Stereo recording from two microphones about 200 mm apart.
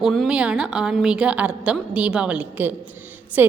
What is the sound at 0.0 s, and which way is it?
A woman's voice, centre (ahead or behind).